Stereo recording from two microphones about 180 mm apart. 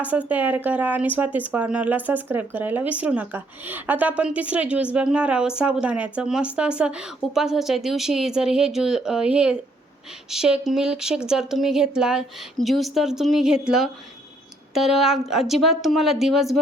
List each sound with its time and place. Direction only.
0.0 s a woman's voice: 10° right (ahead or behind)